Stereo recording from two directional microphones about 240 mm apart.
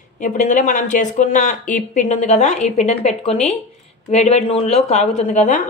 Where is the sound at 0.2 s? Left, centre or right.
Left.